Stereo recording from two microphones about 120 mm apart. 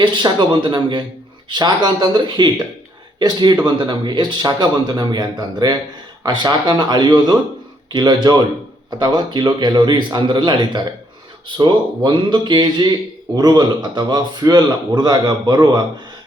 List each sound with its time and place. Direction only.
0.0 s a man's voice: 40° right (ahead or behind)